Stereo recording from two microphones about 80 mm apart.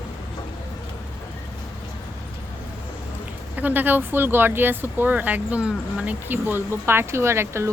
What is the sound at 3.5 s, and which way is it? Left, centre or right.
Speech, right.